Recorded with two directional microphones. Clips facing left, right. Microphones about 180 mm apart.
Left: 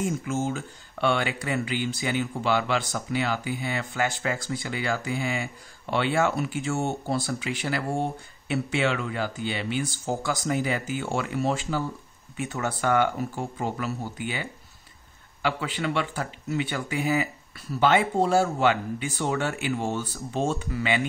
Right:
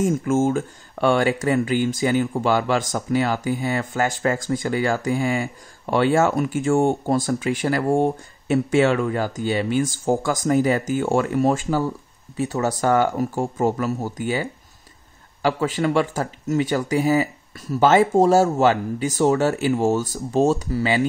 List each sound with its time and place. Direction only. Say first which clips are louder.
0.0 s speech: right 8 dB; 50° right (ahead or behind)